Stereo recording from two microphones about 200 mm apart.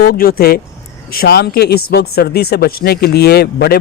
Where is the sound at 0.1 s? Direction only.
50° left (ahead or behind).